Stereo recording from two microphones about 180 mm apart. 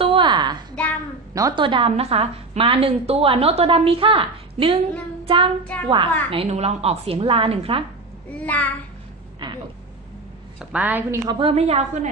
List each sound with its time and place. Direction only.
0.0 s a sound: 30° right (ahead or behind)
1.3 s a woman's voice: 25° right (ahead or behind)
5.2 s child singing: 30° right (ahead or behind)
5.7 s a child's voice: 5° left (ahead or behind)
6.3 s a woman's voice: 35° right (ahead or behind)
8.3 s a child's voice: 10° left (ahead or behind)
9.4 s a sound: 25° right (ahead or behind)
10.6 s a woman's voice: 10° right (ahead or behind)
11.2 s a woman's voice: 30° right (ahead or behind)